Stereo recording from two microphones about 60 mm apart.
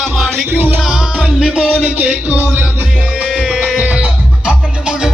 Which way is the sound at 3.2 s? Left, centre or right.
Centre.